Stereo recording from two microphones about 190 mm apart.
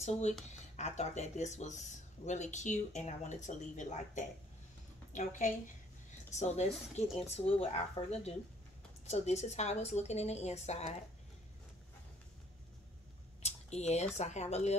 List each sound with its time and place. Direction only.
0.0 s speech: 35° left (ahead or behind)
13.4 s speech: 35° left (ahead or behind)